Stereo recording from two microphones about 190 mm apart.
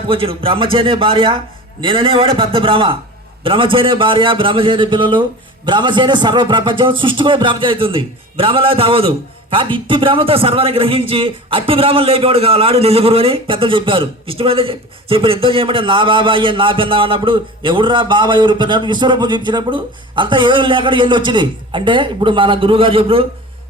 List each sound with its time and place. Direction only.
0.1 s a man's voice: 30° right (ahead or behind)